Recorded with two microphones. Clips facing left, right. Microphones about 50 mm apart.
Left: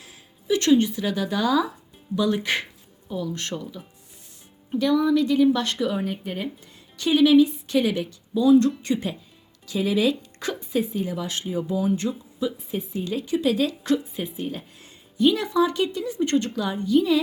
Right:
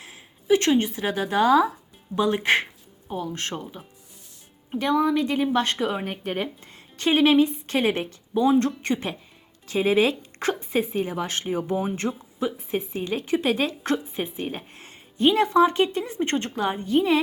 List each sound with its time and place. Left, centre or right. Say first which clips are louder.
0.0 s speech: right 3 dB; right